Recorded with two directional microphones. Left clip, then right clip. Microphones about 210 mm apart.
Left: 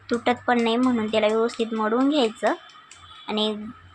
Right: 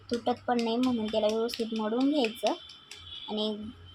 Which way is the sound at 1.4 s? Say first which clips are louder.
Left 8 dB; 25° left (ahead or behind).